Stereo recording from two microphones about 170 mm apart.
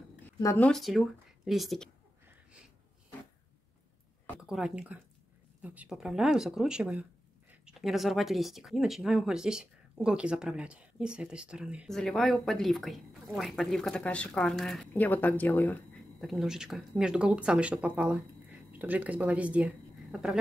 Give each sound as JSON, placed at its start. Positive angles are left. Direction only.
{"t": 0.4, "sound": "speech", "side_deg": 20}
{"t": 0.7, "sound": "speech", "side_deg": 0}
{"t": 4.4, "sound": "speech", "side_deg": -5}